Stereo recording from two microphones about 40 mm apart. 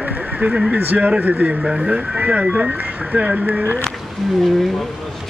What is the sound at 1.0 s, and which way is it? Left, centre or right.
Speech, right.